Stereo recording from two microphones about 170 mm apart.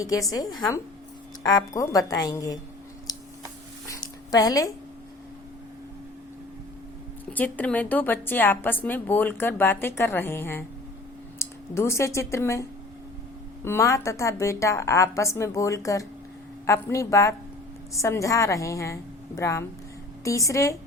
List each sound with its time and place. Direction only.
0.3 s a woman's voice: 20° left (ahead or behind)
3.8 s a sound: 20° left (ahead or behind)
7.3 s a woman's voice: 10° left (ahead or behind)
13.7 s a woman's voice: 15° left (ahead or behind)